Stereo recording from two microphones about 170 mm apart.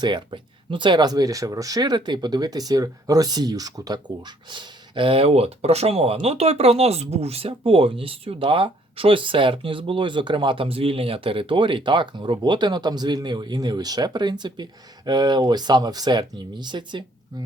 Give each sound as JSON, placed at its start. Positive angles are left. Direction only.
{"t": 0.0, "sound": "speech", "side_deg": -25}